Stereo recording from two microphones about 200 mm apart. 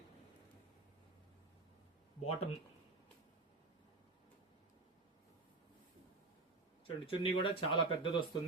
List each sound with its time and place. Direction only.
2.2 s speech: 35° left (ahead or behind)
6.8 s speech: 25° left (ahead or behind)